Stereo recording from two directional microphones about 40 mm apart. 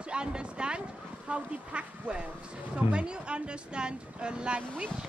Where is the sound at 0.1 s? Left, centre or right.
Right.